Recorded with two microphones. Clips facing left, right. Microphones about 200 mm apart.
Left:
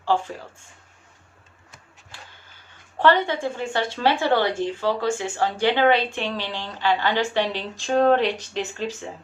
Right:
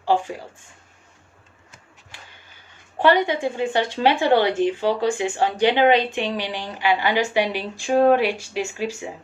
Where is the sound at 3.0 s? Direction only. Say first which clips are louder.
Right 1 dB; 15° right (ahead or behind).